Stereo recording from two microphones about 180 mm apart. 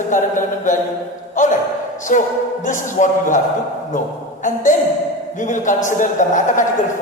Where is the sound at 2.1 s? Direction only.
45° left (ahead or behind).